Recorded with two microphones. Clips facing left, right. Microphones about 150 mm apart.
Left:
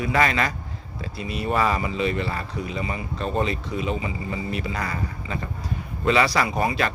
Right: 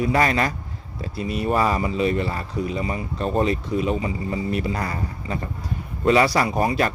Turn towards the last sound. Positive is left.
turn(degrees=-40)  # may be behind; listen again after turning